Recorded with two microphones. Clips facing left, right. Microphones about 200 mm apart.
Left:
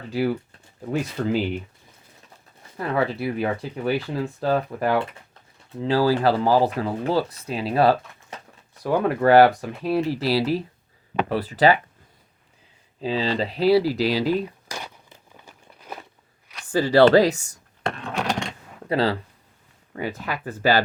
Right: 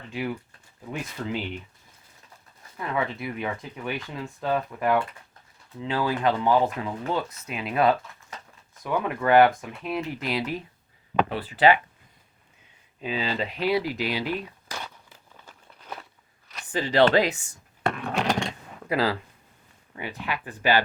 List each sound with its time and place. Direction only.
0.1 s speech: 35° left (ahead or behind)
2.7 s speech: 35° left (ahead or behind)
13.0 s speech: 35° left (ahead or behind)
14.7 s a sound: 15° left (ahead or behind)
16.6 s speech: 20° right (ahead or behind)
16.9 s speech: 40° left (ahead or behind)
18.9 s speech: 30° left (ahead or behind)